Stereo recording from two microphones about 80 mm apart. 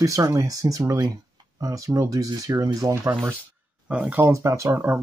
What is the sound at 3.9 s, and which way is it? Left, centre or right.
Speech, centre.